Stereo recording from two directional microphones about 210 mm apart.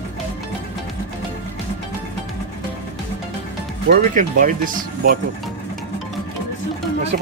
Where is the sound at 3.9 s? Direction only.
40° right (ahead or behind).